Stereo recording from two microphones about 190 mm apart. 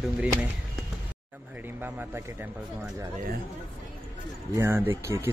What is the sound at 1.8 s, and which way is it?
Speech, 10° right (ahead or behind).